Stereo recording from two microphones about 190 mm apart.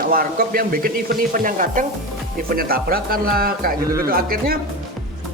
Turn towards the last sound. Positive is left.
turn(degrees=-50)  # may be behind; listen again after turning